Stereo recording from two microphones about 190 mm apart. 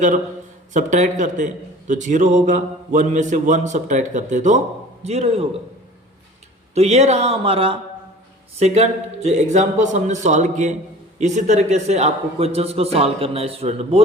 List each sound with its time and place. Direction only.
0.7 s a man's voice: 40° right (ahead or behind)
6.7 s a man's voice: 35° right (ahead or behind)